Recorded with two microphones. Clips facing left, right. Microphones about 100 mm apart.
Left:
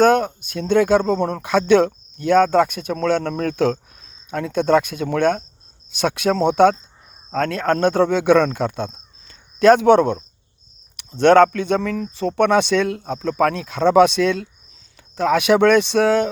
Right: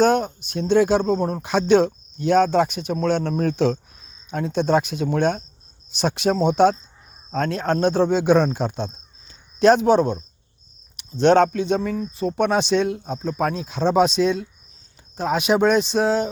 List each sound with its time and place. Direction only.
0.0 s speech: 55° left (ahead or behind)